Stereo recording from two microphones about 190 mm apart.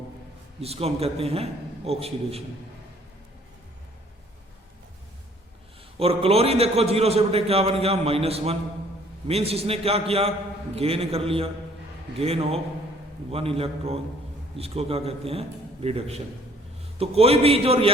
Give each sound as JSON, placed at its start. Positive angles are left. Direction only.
{"t": 0.6, "sound": "a man's voice", "side_deg": -30}
{"t": 6.0, "sound": "a man's voice", "side_deg": -30}